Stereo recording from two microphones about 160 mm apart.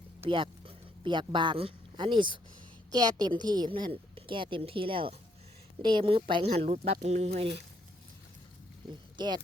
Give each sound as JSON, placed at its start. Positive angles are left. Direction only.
{"t": 0.3, "sound": "a woman's voice", "side_deg": -30}
{"t": 9.1, "sound": "speech", "side_deg": -25}